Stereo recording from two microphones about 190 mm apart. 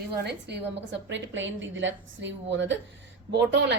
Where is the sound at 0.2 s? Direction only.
60° right (ahead or behind).